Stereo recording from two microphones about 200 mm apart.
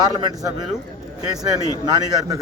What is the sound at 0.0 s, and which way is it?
Speech, 20° right (ahead or behind).